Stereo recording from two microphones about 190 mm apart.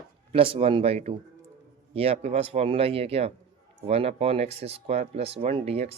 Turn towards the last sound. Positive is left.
turn(degrees=-30)  # may be behind; listen again after turning